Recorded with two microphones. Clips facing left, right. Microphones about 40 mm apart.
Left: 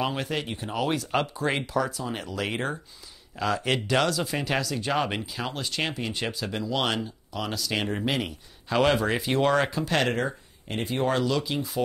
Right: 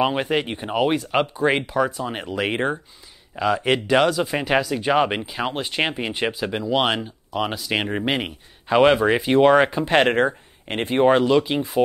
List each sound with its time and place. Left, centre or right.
0.0 s speech: right